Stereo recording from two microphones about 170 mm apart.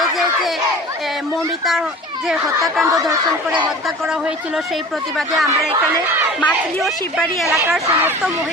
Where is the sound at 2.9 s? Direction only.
20° right (ahead or behind).